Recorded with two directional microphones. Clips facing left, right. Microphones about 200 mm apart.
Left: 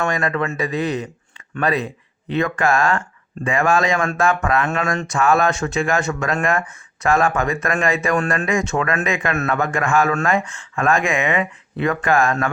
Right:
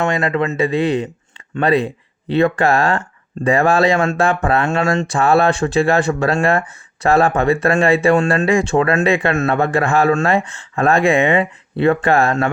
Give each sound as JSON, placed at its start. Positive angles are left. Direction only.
{"t": 0.0, "sound": "speech", "side_deg": -25}